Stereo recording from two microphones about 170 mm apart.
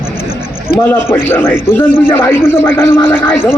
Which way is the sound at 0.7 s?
35° left (ahead or behind).